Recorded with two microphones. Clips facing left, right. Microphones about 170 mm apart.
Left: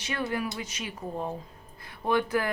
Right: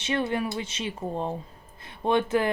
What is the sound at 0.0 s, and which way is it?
Speech, 25° right (ahead or behind).